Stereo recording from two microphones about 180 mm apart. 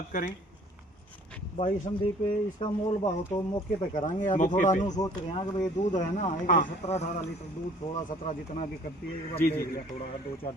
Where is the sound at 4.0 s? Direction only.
45° left (ahead or behind).